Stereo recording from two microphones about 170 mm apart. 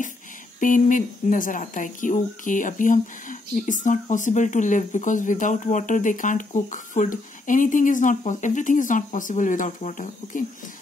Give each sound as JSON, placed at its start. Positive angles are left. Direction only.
{"t": 0.6, "sound": "speech", "side_deg": 50}